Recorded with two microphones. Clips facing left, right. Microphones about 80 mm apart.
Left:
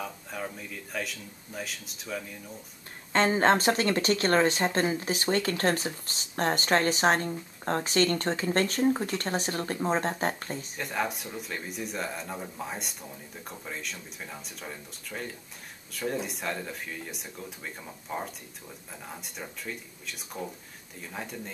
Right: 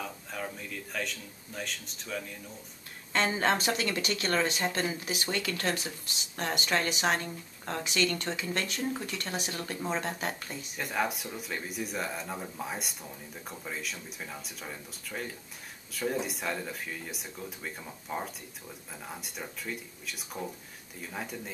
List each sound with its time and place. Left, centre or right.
0.0 s speech: centre
3.1 s speech: left
10.8 s speech: centre